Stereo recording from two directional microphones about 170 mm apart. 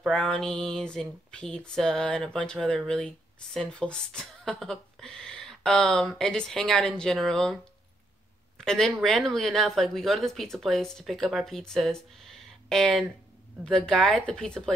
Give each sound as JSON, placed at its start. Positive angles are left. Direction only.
{"t": 0.0, "sound": "speech", "side_deg": 5}